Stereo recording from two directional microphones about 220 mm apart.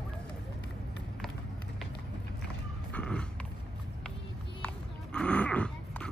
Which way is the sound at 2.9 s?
5° left (ahead or behind).